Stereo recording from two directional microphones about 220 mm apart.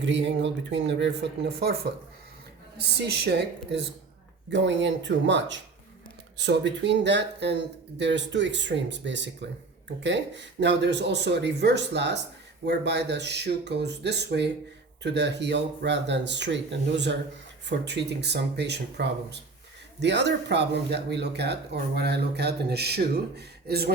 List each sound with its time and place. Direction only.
0.0 s speech: 55° right (ahead or behind)
17.7 s speech: 50° right (ahead or behind)